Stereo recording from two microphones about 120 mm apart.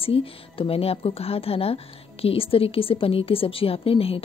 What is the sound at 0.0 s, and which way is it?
A woman's voice, 50° left (ahead or behind).